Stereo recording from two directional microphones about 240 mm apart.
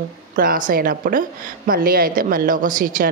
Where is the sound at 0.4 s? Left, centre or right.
Right.